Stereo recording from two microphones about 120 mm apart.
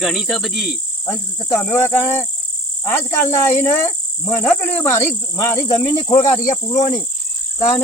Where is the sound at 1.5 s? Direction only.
20° left (ahead or behind).